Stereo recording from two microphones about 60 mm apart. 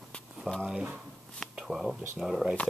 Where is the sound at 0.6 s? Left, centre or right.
Centre.